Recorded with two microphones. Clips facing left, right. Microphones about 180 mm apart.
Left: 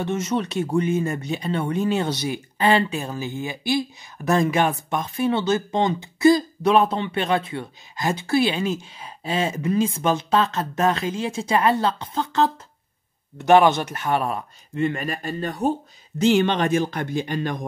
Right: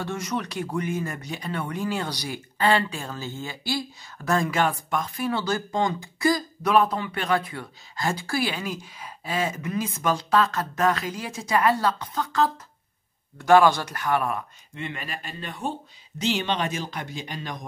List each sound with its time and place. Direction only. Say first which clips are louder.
0.0 s speech: left 5 dB; 25° left (ahead or behind)
14.8 s speech: left 10 dB; 45° left (ahead or behind)